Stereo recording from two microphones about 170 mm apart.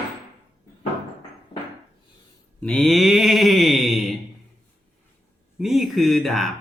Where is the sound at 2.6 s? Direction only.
5° left (ahead or behind).